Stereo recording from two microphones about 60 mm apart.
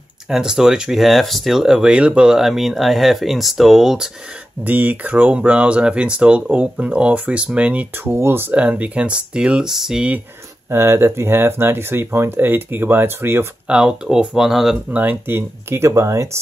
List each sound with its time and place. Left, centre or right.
0.3 s speech: centre
4.6 s speech: right
8.0 s speech: right
8.5 s speech: right; by 10.0 s centre
10.7 s speech: right
13.7 s speech: centre
14.9 s speech: right
16.0 s speech: right